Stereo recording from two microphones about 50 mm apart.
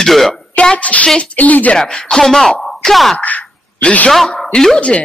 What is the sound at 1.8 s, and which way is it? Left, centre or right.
Speech, centre.